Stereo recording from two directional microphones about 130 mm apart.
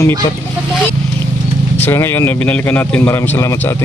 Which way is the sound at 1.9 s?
20° left (ahead or behind).